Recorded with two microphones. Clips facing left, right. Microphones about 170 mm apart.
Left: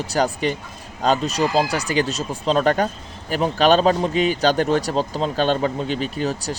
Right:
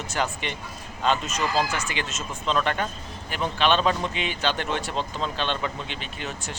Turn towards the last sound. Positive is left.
turn(degrees=35)  # may be behind; listen again after turning